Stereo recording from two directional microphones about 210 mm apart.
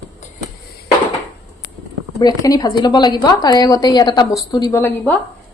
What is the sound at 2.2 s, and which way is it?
A woman's voice, 15° left (ahead or behind).